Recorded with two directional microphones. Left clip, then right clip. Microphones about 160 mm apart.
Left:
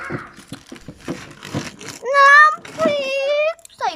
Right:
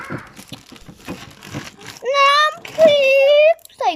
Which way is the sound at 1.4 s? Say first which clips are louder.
Left 4 dB; centre (ahead or behind).